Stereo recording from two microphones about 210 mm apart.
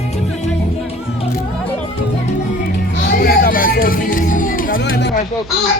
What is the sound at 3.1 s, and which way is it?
Music, 45° left (ahead or behind).